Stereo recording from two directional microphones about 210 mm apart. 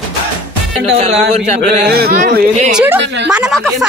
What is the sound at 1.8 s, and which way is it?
Speech, 45° right (ahead or behind).